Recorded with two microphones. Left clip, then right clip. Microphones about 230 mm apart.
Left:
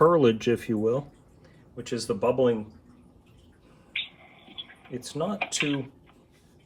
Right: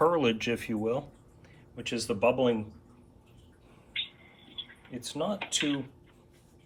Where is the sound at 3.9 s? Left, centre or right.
Left.